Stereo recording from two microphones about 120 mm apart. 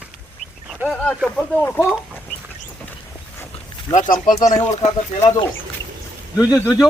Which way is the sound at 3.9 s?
90° left.